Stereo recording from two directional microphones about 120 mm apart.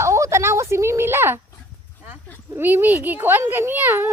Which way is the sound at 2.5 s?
15° right (ahead or behind).